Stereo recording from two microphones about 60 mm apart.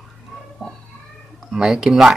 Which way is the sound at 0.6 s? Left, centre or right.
Centre.